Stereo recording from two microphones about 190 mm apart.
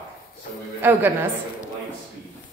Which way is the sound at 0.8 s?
10° right (ahead or behind).